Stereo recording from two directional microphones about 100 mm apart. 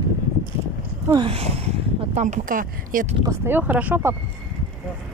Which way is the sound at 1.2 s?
80° right.